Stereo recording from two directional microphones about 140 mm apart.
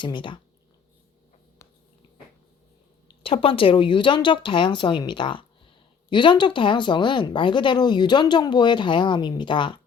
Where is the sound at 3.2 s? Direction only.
40° left (ahead or behind).